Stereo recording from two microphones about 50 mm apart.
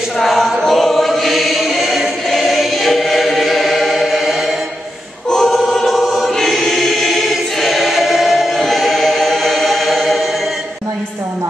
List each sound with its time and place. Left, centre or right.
0.2 s choir: centre
5.3 s choir: centre